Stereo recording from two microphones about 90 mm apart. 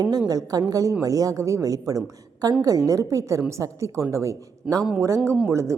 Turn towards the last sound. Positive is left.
turn(degrees=-35)  # may be behind; listen again after turning